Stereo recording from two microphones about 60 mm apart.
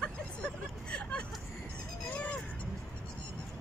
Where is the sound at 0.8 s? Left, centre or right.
Centre.